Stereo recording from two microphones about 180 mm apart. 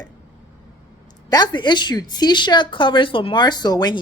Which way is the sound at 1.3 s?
25° left (ahead or behind).